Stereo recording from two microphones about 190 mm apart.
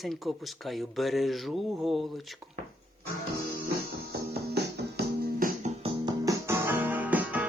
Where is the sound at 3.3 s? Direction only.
50° right (ahead or behind).